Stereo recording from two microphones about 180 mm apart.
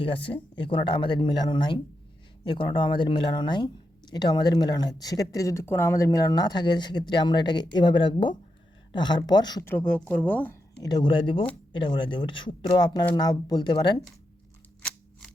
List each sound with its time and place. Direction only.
0.0 s speech: 30° left (ahead or behind)
9.7 s speech: 5° left (ahead or behind)
10.8 s speech: 25° left (ahead or behind)